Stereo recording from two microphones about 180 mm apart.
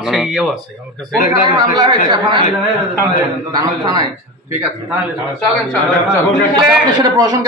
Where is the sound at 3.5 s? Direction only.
20° right (ahead or behind).